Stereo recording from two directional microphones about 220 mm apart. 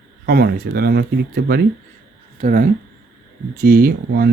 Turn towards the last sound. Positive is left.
turn(degrees=-45)  # may be behind; listen again after turning